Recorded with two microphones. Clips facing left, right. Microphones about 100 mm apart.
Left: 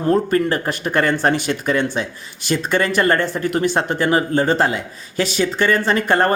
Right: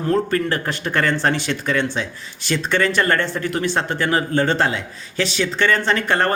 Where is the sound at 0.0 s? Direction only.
30° left (ahead or behind).